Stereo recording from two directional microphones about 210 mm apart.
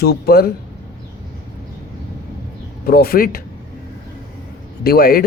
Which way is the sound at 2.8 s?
45° left (ahead or behind).